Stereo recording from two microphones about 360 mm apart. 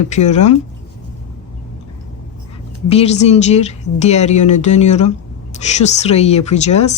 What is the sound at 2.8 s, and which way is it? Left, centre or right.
Speech, centre.